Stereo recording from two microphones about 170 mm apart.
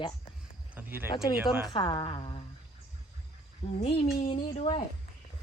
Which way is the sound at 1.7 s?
30° left (ahead or behind).